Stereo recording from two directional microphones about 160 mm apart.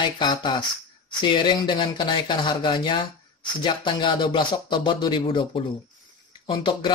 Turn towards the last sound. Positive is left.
turn(degrees=30)  # may be behind; listen again after turning